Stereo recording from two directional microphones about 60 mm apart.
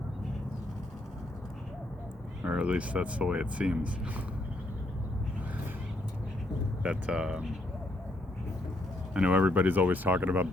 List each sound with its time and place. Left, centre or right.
2.4 s speech: right
6.8 s speech: centre
9.1 s speech: right